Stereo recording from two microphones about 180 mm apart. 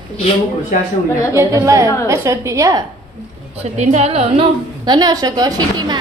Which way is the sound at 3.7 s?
40° right (ahead or behind).